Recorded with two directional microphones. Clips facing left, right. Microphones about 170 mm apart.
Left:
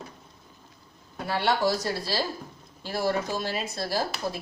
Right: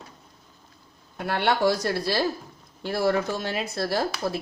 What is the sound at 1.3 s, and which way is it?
Speech, 60° right (ahead or behind).